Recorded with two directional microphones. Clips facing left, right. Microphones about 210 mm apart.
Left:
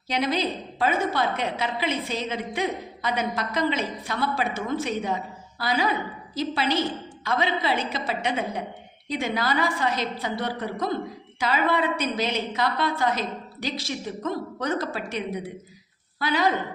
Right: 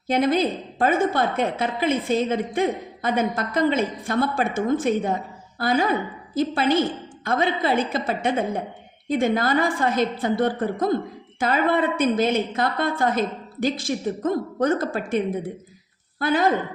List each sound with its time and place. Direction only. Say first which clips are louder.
0.1 s a woman's voice: right 5 dB; 50° right (ahead or behind)